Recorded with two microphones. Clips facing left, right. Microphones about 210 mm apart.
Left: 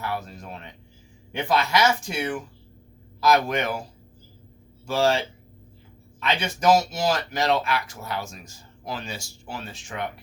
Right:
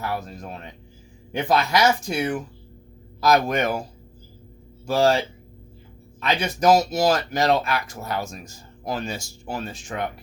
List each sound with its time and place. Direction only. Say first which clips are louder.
0.0 s speech: right 2 dB; 40° right (ahead or behind)
4.9 s speech: right 3 dB; 40° right (ahead or behind)